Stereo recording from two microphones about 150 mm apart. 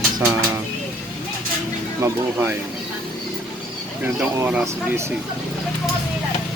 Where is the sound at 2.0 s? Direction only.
15° right (ahead or behind).